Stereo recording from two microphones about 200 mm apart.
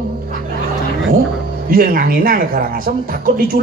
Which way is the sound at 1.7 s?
45° right (ahead or behind).